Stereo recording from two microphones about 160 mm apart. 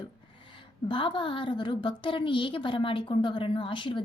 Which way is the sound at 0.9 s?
30° left (ahead or behind).